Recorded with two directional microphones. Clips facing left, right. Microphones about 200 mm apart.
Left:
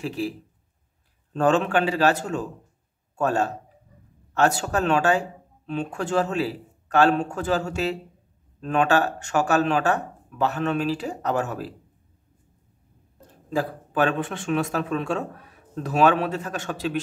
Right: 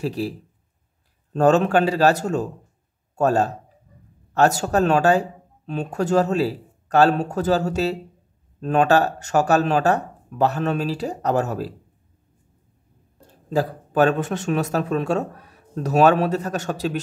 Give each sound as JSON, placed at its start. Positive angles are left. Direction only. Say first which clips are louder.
{"t": 0.0, "sound": "speech", "louder": "right 3 dB", "side_deg": -40}
{"t": 1.3, "sound": "speech", "louder": "right 4 dB", "side_deg": -40}
{"t": 13.5, "sound": "speech", "louder": "right 4 dB", "side_deg": -40}